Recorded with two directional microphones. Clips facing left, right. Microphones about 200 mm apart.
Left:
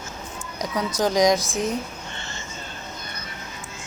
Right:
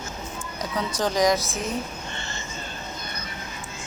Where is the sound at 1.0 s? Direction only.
15° left (ahead or behind).